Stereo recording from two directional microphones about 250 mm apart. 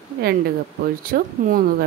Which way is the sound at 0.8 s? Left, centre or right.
Right.